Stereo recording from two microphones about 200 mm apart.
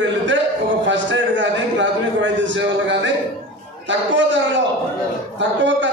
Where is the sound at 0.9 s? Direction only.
65° right (ahead or behind).